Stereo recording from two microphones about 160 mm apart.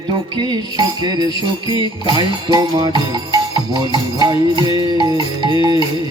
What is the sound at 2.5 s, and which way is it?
Music, 25° right (ahead or behind).